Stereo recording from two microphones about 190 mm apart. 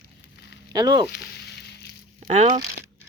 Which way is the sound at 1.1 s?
60° left (ahead or behind).